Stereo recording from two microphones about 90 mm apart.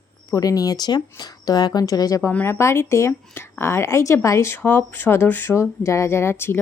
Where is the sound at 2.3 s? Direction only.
25° left (ahead or behind).